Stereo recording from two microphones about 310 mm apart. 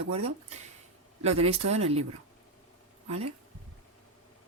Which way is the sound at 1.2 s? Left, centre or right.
Centre.